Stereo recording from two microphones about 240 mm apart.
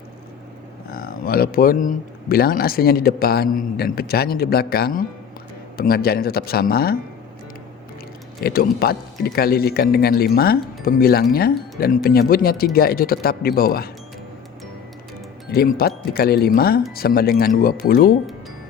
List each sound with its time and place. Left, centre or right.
0.9 s speech: left
8.4 s speech: left
15.5 s speech: left